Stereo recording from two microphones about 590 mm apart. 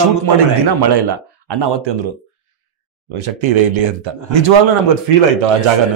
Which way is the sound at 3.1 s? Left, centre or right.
Right.